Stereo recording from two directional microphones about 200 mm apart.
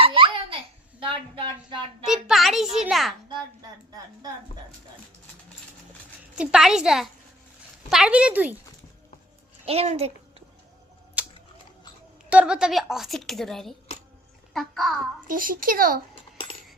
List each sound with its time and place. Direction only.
0.0 s babbling: 25° right (ahead or behind)
0.9 s a sound: 25° right (ahead or behind)
2.0 s a child's voice: centre (ahead or behind)
6.3 s a woman's voice: 5° right (ahead or behind)
9.6 s speech: 30° right (ahead or behind)
11.2 s a sound: 5° right (ahead or behind)
12.3 s a woman's voice: 5° right (ahead or behind)
15.3 s a child's voice: 45° right (ahead or behind)